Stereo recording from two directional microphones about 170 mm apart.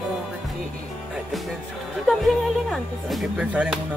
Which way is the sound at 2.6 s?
5° right (ahead or behind).